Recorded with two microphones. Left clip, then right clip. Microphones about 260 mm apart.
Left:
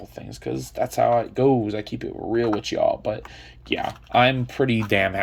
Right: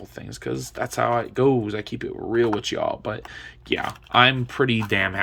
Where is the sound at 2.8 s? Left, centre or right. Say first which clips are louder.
Left 4 dB; right.